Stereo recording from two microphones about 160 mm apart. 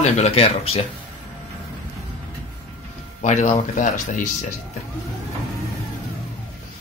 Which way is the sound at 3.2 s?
45° left (ahead or behind).